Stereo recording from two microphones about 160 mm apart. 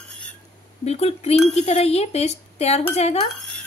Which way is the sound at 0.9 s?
40° left (ahead or behind).